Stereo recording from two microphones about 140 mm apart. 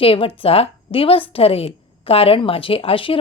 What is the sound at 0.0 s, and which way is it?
A woman's voice, 40° left (ahead or behind).